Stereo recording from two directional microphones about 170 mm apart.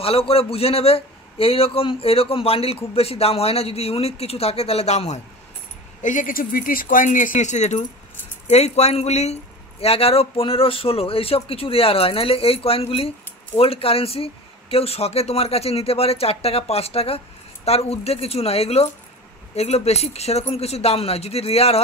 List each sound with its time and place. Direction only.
0.0 s a man's voice: 35° left (ahead or behind)
6.0 s a man's voice: 50° left (ahead or behind)